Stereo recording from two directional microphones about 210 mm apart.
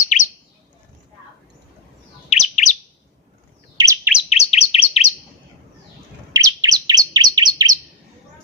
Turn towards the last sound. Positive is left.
turn(degrees=-20)  # may be behind; listen again after turning